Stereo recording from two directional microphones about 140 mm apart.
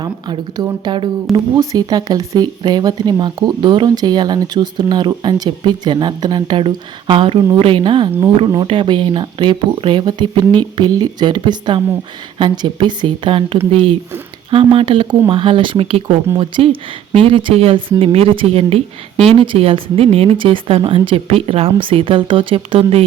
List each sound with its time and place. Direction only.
0.0 s speech: 30° right (ahead or behind)